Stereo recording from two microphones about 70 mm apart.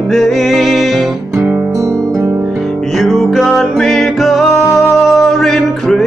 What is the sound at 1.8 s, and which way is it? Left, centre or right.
Guitar, right.